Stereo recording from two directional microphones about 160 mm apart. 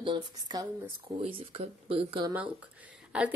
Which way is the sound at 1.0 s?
35° right (ahead or behind).